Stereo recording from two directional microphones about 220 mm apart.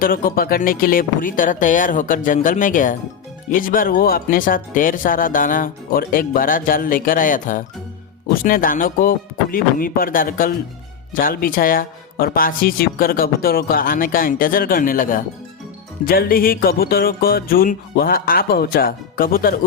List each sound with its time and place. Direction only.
0.0 s speech: 40° left (ahead or behind)